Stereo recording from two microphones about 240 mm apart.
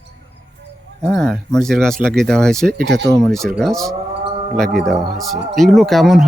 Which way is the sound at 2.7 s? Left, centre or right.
Right.